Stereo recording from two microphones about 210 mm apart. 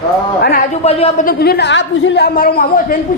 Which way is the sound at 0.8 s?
30° left (ahead or behind).